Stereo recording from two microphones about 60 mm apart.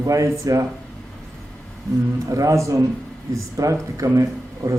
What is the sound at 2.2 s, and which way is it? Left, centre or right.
Speech, right.